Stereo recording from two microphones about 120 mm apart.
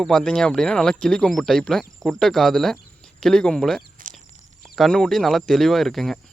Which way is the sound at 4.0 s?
90° right.